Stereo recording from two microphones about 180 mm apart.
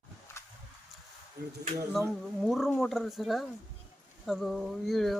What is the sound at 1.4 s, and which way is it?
Speech, 60° right (ahead or behind).